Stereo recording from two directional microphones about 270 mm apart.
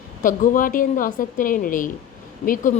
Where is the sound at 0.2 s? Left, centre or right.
Left.